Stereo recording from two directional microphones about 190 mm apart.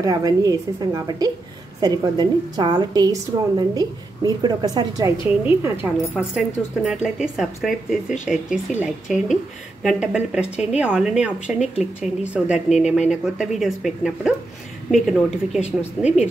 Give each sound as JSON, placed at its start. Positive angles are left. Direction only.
{"t": 0.0, "sound": "a woman's voice", "side_deg": -20}
{"t": 11.6, "sound": "speech", "side_deg": 35}
{"t": 12.4, "sound": "a woman's voice", "side_deg": -5}